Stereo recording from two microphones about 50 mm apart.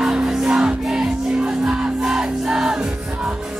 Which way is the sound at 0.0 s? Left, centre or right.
Centre.